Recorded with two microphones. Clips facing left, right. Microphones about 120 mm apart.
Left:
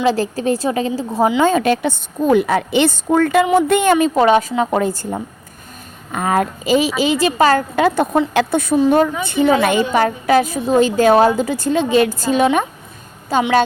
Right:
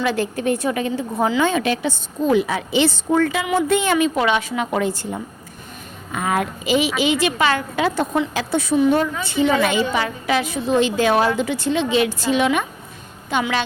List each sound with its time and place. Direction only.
0.0 s a woman's voice: 35° left (ahead or behind)
1.5 s a woman's voice: 45° left (ahead or behind)
3.9 s a woman's voice: 35° left (ahead or behind)